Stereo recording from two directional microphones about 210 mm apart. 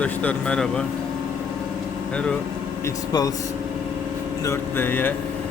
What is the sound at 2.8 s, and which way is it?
Speech, 15° left (ahead or behind).